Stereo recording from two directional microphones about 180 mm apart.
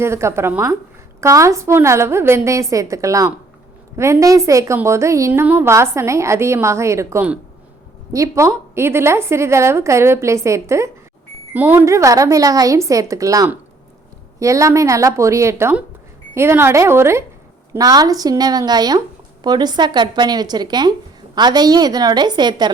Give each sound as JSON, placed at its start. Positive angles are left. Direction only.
{"t": 0.0, "sound": "a woman's voice", "side_deg": -15}